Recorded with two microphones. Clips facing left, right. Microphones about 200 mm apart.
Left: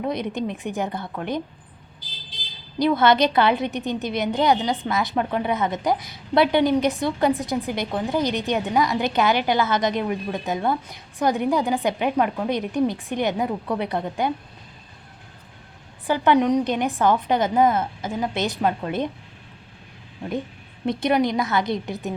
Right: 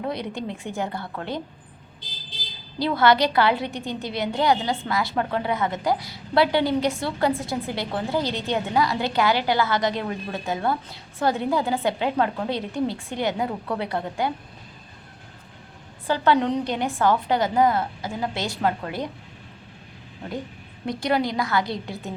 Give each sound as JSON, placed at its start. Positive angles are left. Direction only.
{"t": 0.0, "sound": "a woman's voice", "side_deg": 20}
{"t": 2.7, "sound": "a woman's voice", "side_deg": 20}
{"t": 16.0, "sound": "a woman's voice", "side_deg": 15}
{"t": 20.8, "sound": "a woman's voice", "side_deg": 20}